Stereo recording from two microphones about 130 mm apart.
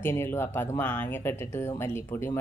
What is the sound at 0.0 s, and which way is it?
Speech, 15° left (ahead or behind).